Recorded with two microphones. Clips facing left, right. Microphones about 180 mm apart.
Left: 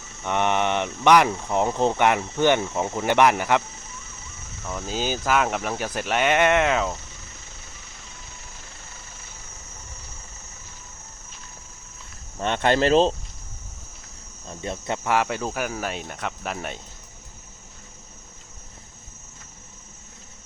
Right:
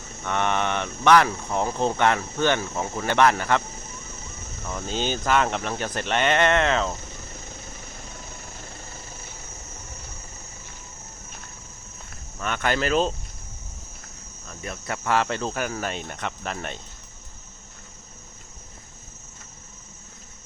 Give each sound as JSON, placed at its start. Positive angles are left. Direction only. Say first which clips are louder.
{"t": 0.3, "sound": "speech", "louder": "left 2 dB", "side_deg": 15}
{"t": 4.6, "sound": "speech", "louder": "even", "side_deg": 5}
{"t": 12.4, "sound": "speech", "louder": "left 5 dB", "side_deg": 30}
{"t": 14.4, "sound": "speech", "louder": "left 4 dB", "side_deg": 25}